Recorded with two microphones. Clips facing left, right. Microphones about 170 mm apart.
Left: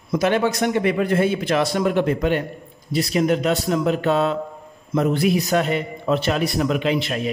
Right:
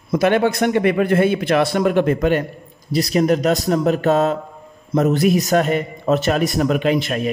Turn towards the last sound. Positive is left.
turn(degrees=-45)  # may be behind; listen again after turning